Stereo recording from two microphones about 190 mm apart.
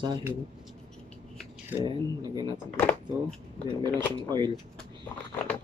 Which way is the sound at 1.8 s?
25° right (ahead or behind).